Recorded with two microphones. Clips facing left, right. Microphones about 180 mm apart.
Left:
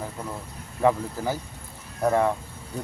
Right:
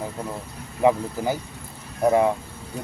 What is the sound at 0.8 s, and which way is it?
Speech, 15° right (ahead or behind).